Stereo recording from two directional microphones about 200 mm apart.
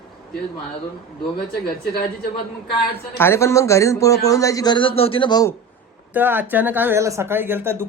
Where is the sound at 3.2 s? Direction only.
15° left (ahead or behind).